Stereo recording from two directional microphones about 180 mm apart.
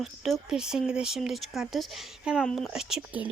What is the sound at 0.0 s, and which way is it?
Speech, centre (ahead or behind).